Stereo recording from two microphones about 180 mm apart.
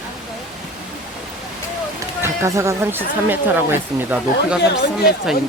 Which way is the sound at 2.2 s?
15° right (ahead or behind).